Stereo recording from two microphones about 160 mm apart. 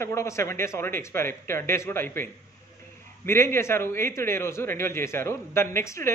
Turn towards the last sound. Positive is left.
turn(degrees=15)  # may be behind; listen again after turning